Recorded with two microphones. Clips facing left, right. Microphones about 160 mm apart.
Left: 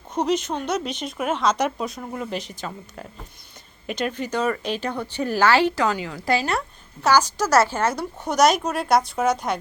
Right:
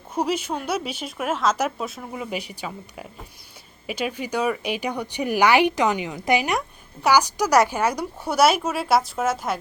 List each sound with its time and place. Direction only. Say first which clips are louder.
0.1 s speech: left 2 dB; 10° right (ahead or behind)